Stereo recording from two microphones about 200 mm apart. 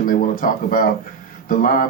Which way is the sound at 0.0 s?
45° left (ahead or behind).